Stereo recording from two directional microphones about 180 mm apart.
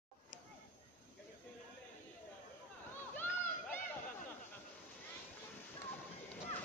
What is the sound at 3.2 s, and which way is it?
Run, 10° left (ahead or behind).